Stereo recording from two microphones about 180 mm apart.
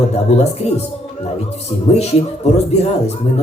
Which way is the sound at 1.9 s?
35° left (ahead or behind).